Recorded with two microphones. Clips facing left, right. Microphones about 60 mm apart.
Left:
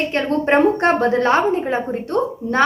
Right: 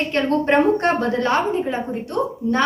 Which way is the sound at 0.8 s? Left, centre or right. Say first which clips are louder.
Left 4 dB; left.